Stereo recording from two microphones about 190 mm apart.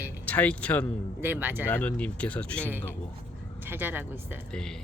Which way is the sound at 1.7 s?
10° left (ahead or behind).